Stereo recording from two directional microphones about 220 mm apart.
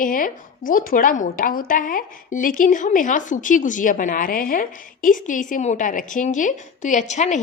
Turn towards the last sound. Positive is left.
turn(degrees=30)  # may be behind; listen again after turning